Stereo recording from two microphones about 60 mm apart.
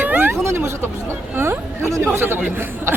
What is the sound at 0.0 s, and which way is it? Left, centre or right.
Vehicle, right.